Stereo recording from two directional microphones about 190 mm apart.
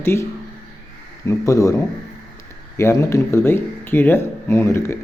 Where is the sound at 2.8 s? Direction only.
15° left (ahead or behind).